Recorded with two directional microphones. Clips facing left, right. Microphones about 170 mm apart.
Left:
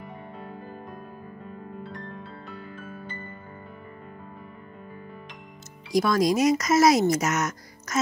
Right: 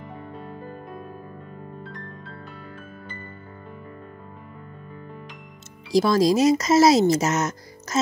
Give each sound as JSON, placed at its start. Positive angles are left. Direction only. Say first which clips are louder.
{"t": 5.9, "sound": "speech", "louder": "right 3 dB", "side_deg": -30}